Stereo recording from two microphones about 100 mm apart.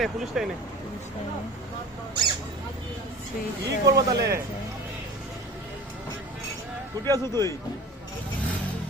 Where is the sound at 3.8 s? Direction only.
35° right (ahead or behind).